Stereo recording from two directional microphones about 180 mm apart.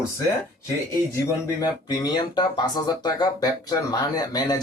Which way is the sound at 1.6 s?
20° left (ahead or behind).